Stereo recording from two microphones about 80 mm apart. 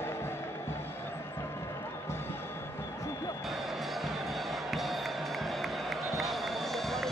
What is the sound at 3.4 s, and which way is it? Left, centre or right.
Music, centre.